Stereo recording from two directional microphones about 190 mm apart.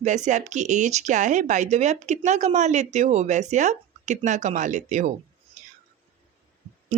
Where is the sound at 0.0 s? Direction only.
40° right (ahead or behind).